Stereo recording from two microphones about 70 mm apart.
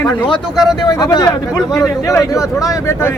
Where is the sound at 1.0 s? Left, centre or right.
Left.